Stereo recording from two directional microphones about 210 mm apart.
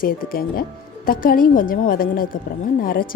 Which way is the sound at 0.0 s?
45° left (ahead or behind).